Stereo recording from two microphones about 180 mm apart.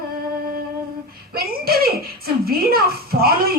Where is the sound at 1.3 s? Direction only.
55° right (ahead or behind).